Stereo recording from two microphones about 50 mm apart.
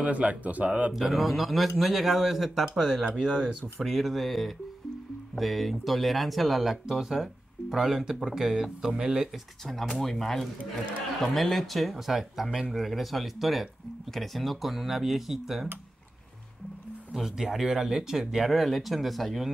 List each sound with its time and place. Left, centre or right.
0.0 s speech: right
0.9 s speech: centre
8.9 s speech: centre
9.7 s speech: centre
12.4 s speech: right
12.7 s speech: centre
17.1 s speech: centre